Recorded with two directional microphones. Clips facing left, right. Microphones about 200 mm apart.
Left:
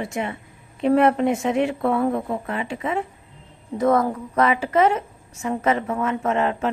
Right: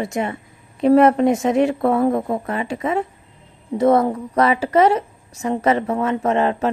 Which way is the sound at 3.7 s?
30° right (ahead or behind).